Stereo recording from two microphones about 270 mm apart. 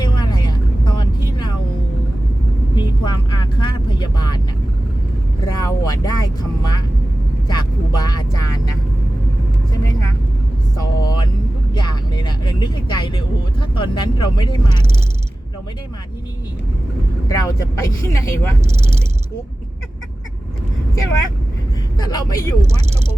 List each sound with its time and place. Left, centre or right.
0.0 s vehicle: centre
2.7 s vehicle: centre
5.5 s speech: centre
7.4 s vehicle: centre
10.8 s vehicle: centre
17.2 s speech: centre
21.9 s speech: centre